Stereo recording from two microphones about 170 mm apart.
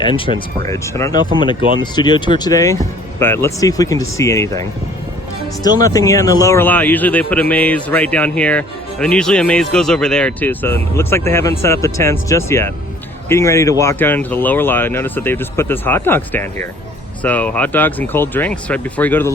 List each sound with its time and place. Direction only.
0.0 s speech: 25° left (ahead or behind)
5.8 s speech: 20° left (ahead or behind)